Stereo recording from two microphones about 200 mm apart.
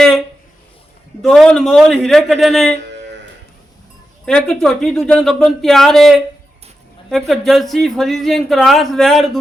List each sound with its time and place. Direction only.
1.2 s speech: 5° left (ahead or behind)
2.7 s a sound: 60° right (ahead or behind)
4.3 s speech: 5° left (ahead or behind)